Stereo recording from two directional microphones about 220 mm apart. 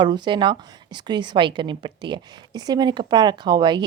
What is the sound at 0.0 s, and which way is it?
A woman's voice, 20° right (ahead or behind).